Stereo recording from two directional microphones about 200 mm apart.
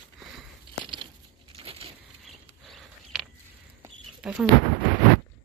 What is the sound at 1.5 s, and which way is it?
Coin, 30° right (ahead or behind).